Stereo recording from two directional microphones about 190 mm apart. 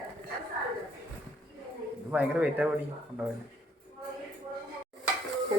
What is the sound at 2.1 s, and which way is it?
Speech, 5° right (ahead or behind).